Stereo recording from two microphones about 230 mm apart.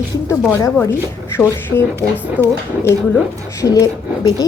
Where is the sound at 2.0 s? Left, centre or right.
Centre.